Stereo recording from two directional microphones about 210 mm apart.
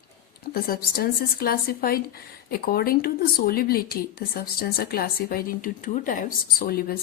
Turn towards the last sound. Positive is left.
turn(degrees=45)  # may be behind; listen again after turning